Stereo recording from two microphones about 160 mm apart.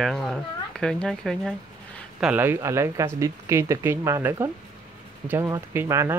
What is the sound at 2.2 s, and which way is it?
Speech, 10° right (ahead or behind).